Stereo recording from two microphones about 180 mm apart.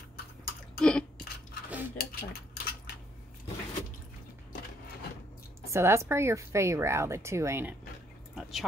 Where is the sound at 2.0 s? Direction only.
55° left (ahead or behind).